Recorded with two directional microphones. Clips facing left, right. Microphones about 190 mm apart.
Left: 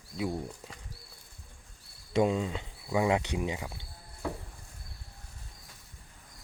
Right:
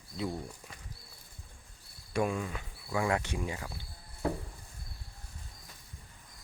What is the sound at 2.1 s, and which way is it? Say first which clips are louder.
Speech: left 5 dB; 20° left (ahead or behind).